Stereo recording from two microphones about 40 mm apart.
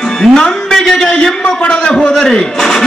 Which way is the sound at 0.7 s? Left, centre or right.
Centre.